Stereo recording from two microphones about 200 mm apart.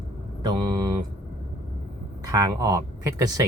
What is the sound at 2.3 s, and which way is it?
Speech, 20° right (ahead or behind).